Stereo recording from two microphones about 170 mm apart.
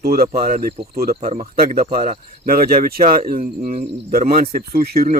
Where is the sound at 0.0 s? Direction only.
60° right (ahead or behind).